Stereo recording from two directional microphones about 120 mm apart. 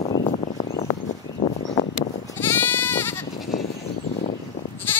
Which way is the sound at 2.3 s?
20° left (ahead or behind).